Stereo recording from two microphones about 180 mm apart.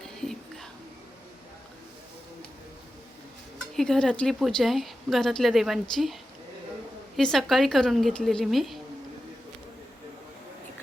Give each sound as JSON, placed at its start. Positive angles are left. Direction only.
{"t": 0.0, "sound": "whispering", "side_deg": 0}
{"t": 3.8, "sound": "a woman's voice", "side_deg": 5}
{"t": 7.2, "sound": "a woman's voice", "side_deg": 0}